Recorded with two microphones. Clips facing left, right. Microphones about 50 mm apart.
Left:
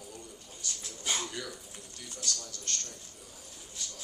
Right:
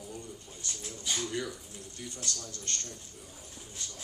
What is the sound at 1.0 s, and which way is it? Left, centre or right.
Speech, left.